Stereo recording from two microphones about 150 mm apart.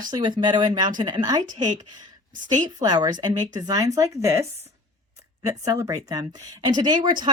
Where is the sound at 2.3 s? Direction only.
60° right (ahead or behind).